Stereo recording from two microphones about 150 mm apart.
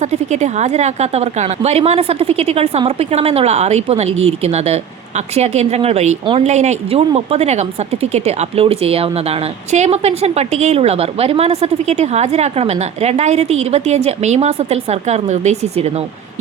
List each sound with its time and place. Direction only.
0.0 s a woman's voice: 50° right (ahead or behind)